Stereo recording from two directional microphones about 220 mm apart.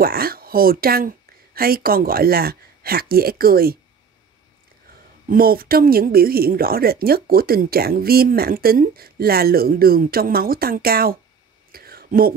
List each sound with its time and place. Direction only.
0.0 s speech: 45° right (ahead or behind)
5.3 s speech: 40° right (ahead or behind)
11.7 s whispering: 45° right (ahead or behind)